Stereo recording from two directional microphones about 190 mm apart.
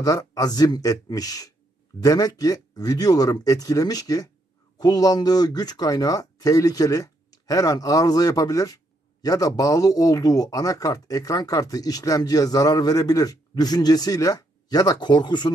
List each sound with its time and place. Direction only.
0.0 s speech: 20° left (ahead or behind)